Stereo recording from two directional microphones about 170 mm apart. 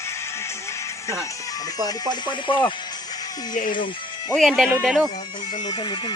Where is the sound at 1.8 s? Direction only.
25° left (ahead or behind).